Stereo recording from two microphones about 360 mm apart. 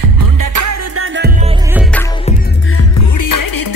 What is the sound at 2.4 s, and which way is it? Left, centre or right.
Music, left.